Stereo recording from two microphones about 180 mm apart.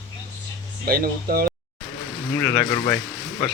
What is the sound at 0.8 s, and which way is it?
Speech, 55° right (ahead or behind).